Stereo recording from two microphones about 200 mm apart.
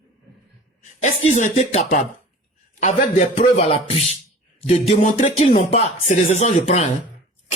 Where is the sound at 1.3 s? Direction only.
35° left (ahead or behind).